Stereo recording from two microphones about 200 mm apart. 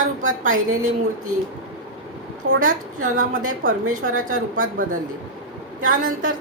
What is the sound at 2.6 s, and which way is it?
A woman's voice, 40° right (ahead or behind).